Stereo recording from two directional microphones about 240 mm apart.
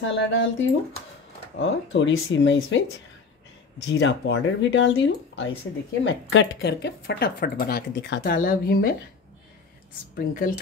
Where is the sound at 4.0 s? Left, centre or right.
Left.